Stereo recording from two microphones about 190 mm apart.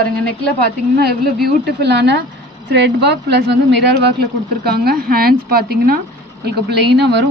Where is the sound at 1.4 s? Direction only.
60° right (ahead or behind).